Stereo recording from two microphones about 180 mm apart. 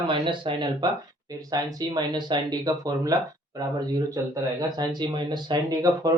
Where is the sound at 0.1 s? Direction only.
25° right (ahead or behind).